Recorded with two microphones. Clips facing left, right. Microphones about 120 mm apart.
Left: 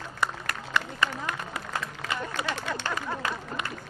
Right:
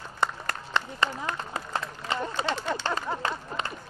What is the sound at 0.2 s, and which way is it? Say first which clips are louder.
Applause: right 2 dB; 25° right (ahead or behind).